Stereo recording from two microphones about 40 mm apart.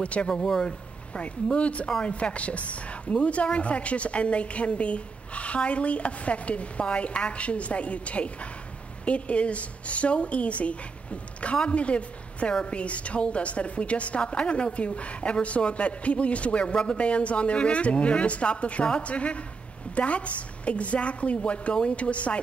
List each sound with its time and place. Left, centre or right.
0.0 s a woman's voice: left
0.3 s speech: centre
1.1 s a woman's voice: left